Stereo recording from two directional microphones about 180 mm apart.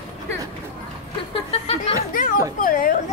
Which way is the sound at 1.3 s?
30° left (ahead or behind).